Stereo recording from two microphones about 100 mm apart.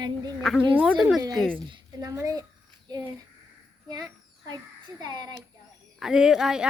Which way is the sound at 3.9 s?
40° right (ahead or behind).